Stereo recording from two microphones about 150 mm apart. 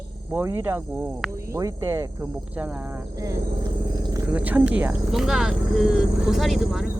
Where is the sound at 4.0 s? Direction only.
25° right (ahead or behind).